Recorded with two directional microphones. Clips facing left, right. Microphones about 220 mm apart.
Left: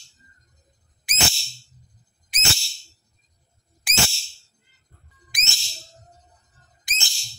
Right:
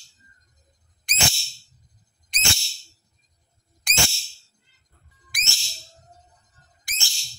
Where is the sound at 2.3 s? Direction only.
5° left (ahead or behind).